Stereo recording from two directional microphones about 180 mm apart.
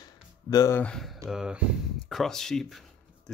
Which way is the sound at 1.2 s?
5° right (ahead or behind).